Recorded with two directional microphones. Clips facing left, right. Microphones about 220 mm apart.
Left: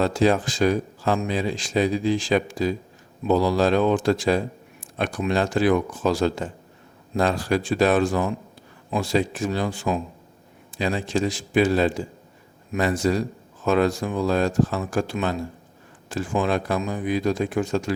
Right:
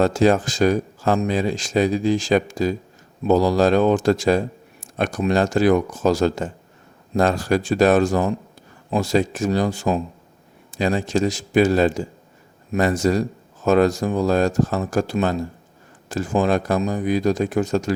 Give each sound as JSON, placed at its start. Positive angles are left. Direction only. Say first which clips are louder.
{"t": 0.0, "sound": "speech", "louder": "right 3 dB", "side_deg": -45}